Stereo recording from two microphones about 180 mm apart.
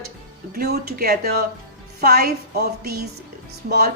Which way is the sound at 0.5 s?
60° right (ahead or behind).